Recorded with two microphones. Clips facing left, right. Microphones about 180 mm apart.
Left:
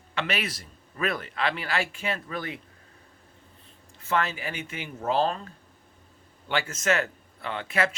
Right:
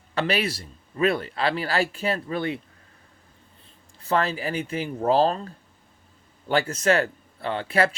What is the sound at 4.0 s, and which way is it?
Speech, 35° right (ahead or behind).